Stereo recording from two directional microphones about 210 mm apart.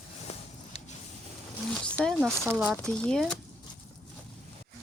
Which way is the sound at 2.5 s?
Centre (ahead or behind).